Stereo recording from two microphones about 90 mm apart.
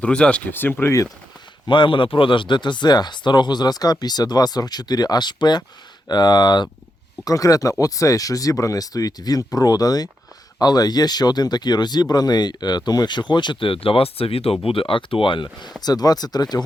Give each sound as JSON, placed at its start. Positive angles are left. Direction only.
{"t": 0.0, "sound": "speech", "side_deg": 10}
{"t": 0.5, "sound": "speech", "side_deg": 25}
{"t": 1.6, "sound": "speech", "side_deg": 60}
{"t": 7.3, "sound": "speech", "side_deg": 40}
{"t": 15.8, "sound": "speech", "side_deg": 45}